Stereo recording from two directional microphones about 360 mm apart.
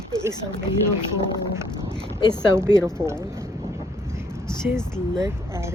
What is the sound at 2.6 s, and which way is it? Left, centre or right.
Speech, centre.